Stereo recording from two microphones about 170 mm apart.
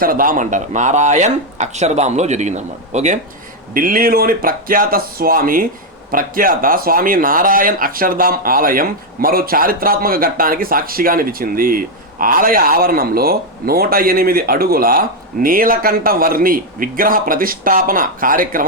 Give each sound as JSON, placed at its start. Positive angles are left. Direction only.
{"t": 0.0, "sound": "speech", "side_deg": -55}
{"t": 3.8, "sound": "speech", "side_deg": -55}